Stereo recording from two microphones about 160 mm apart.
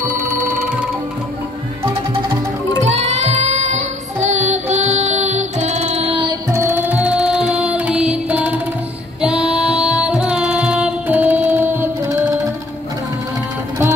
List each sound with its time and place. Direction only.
2.9 s music: 45° right (ahead or behind)
6.5 s music: 15° right (ahead or behind)